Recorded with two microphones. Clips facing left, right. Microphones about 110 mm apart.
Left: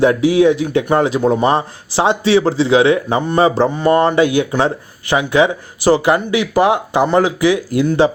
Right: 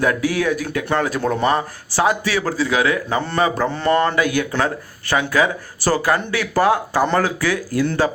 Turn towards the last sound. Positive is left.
turn(degrees=20)  # may be behind; listen again after turning